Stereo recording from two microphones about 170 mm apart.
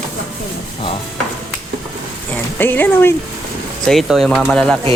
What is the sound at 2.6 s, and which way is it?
Speech, 10° left (ahead or behind).